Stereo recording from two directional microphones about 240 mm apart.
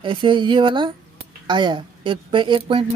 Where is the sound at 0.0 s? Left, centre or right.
Centre.